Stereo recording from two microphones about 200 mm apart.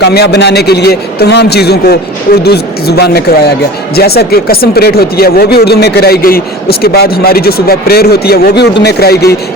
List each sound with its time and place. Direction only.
0.0 s speech: 55° left (ahead or behind)